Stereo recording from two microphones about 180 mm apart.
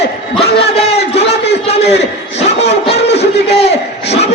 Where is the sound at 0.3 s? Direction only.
35° left (ahead or behind).